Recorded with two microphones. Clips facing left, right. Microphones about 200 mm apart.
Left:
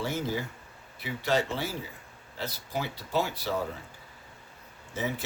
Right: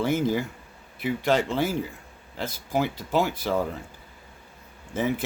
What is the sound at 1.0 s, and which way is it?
Speech, 50° right (ahead or behind).